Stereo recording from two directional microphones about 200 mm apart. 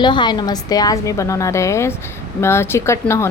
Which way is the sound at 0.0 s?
20° left (ahead or behind).